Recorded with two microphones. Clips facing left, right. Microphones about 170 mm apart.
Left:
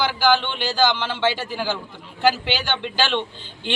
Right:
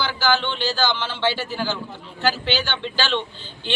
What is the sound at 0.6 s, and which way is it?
A man's voice, 15° left (ahead or behind).